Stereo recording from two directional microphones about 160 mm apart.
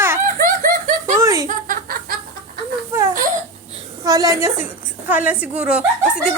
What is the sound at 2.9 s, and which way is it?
Crying, 15° right (ahead or behind).